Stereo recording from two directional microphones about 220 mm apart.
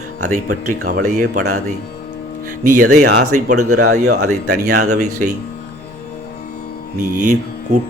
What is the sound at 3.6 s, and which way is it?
Speech, 80° right.